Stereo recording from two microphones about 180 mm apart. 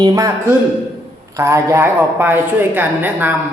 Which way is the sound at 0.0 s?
20° right (ahead or behind).